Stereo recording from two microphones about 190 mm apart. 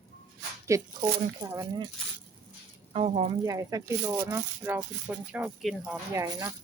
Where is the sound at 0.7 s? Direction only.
15° right (ahead or behind).